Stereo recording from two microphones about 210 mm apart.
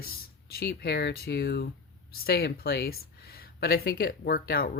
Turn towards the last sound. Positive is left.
turn(degrees=45)  # may be behind; listen again after turning